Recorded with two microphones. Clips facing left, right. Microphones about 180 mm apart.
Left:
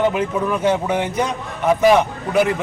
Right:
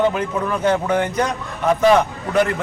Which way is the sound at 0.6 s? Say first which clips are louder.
Right 2 dB; 20° left (ahead or behind).